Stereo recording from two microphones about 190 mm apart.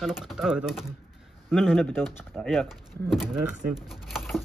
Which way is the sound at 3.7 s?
Centre (ahead or behind).